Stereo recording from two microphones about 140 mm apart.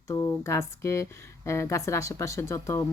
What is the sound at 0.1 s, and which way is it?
Speech, 25° left (ahead or behind).